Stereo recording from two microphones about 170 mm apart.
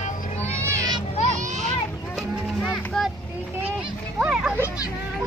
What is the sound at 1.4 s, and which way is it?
Children playing, 45° right (ahead or behind).